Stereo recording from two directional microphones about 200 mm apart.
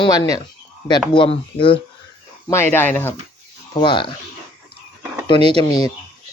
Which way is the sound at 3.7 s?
25° left (ahead or behind).